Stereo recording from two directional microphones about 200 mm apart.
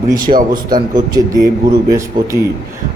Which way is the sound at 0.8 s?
20° right (ahead or behind).